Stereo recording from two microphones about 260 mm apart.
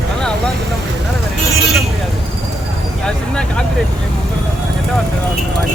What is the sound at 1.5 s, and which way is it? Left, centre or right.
Vehicle, centre.